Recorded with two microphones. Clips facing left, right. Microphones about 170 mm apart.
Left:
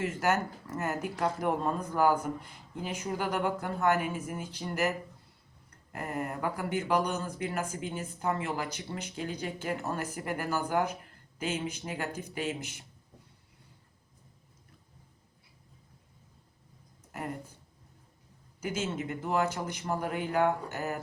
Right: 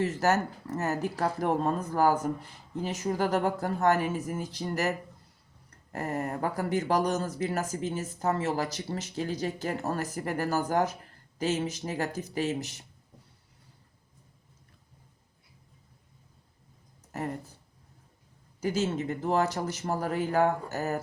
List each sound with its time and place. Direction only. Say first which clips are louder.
0.0 s speech: right 3 dB; 35° right (ahead or behind)
5.9 s speech: right 3 dB; 40° right (ahead or behind)
18.6 s speech: right 5 dB; 35° right (ahead or behind)